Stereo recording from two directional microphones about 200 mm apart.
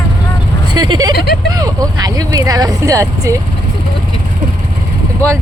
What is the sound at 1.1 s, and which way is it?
Vehicle, 50° left (ahead or behind).